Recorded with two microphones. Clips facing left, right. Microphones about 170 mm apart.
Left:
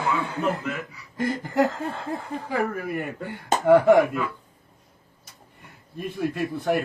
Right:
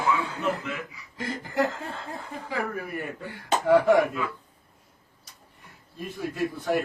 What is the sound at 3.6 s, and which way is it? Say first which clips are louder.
Speech: left 4 dB; 50° left (ahead or behind).